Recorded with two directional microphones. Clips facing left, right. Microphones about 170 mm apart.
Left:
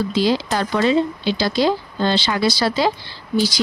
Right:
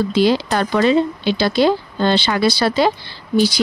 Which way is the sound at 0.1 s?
60° right (ahead or behind).